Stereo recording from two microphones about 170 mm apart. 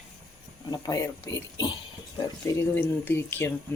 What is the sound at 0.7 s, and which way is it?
Speech, 25° left (ahead or behind).